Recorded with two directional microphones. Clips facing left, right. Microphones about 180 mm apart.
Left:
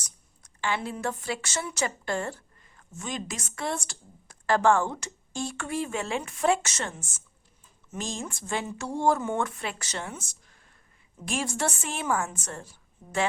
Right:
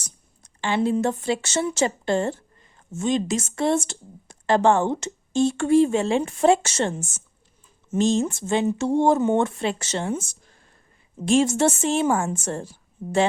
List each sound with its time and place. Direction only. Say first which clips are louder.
0.0 s speech: right 6 dB; 25° right (ahead or behind)